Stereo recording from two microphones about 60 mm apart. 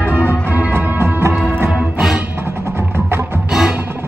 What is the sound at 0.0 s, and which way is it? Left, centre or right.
Organ, left.